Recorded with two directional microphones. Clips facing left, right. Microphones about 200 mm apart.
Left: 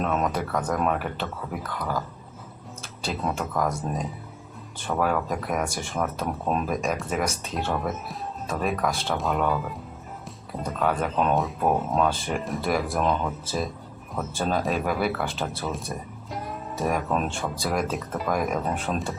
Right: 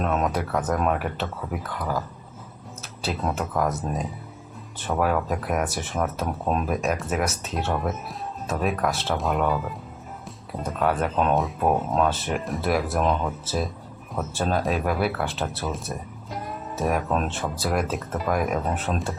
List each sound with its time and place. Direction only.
0.0 s speech: centre (ahead or behind)
3.0 s speech: centre (ahead or behind)
4.9 s speech: 5° right (ahead or behind)